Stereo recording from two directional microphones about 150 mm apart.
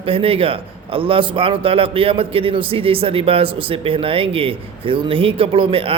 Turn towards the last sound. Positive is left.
turn(degrees=-40)  # may be behind; listen again after turning